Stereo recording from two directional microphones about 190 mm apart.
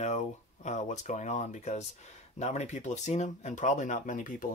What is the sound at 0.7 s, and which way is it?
Speech, 40° left (ahead or behind).